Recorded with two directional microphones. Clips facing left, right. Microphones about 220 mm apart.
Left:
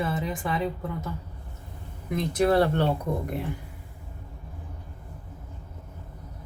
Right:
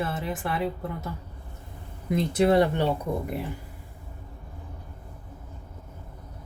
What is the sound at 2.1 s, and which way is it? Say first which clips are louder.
Speech: right 1 dB; 20° right (ahead or behind).